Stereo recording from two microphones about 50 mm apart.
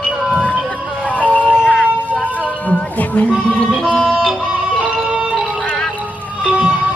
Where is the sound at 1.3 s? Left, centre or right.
Left.